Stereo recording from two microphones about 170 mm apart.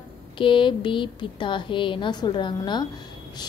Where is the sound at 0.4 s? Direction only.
30° left (ahead or behind).